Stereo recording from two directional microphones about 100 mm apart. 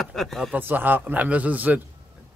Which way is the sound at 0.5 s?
20° right (ahead or behind).